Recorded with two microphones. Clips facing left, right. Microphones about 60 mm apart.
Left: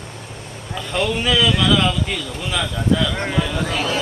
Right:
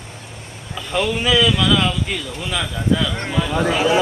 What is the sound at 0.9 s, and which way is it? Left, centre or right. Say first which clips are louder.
Speech: right 1 dB; centre.